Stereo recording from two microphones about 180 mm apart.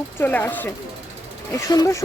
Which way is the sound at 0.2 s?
10° left (ahead or behind).